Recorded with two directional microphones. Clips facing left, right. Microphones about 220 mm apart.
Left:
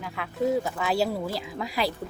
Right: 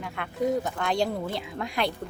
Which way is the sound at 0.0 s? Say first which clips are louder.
Left 1 dB; centre (ahead or behind).